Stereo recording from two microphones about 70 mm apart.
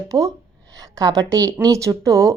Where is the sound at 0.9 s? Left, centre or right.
Right.